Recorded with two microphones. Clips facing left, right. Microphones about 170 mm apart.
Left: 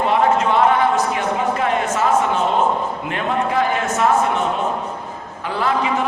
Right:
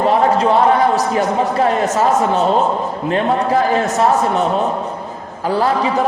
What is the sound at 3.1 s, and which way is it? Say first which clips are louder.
A man's voice: right 6 dB; 35° right (ahead or behind).